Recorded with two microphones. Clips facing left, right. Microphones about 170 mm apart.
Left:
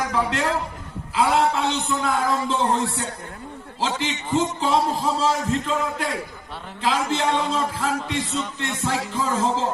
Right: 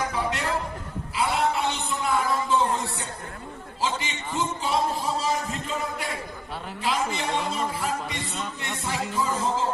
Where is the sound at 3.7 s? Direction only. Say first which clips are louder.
Left 4 dB; 80° left.